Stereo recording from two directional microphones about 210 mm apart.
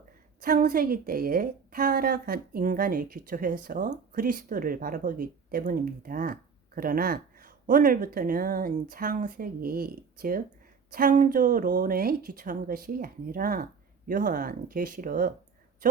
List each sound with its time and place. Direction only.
0.4 s a woman's voice: 40° right (ahead or behind)